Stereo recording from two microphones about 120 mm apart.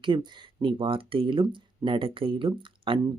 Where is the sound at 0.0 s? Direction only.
40° right (ahead or behind).